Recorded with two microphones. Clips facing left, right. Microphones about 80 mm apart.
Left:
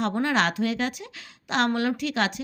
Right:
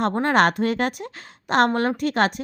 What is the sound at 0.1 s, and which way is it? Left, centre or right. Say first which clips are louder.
A woman's voice: right 5 dB; right.